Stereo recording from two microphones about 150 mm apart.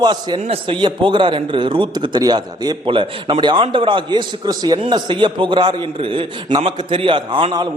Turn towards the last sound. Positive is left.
turn(degrees=-35)  # may be behind; listen again after turning